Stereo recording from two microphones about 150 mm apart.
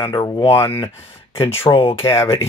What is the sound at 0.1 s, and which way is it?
Speech, 25° left (ahead or behind).